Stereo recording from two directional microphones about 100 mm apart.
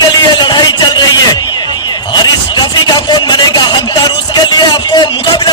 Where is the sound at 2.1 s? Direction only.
45° left (ahead or behind).